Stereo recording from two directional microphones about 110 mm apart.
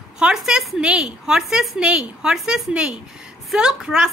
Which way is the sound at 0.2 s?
5° right (ahead or behind).